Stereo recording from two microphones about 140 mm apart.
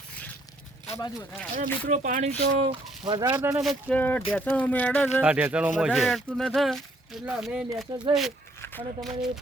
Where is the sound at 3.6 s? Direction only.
5° left (ahead or behind).